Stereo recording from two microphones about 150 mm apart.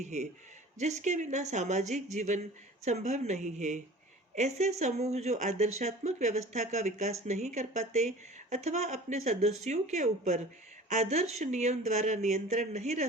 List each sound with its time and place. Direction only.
0.0 s speech: 50° right (ahead or behind)